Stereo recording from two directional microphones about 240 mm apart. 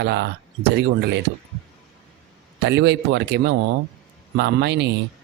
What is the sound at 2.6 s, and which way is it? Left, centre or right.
Speech, right.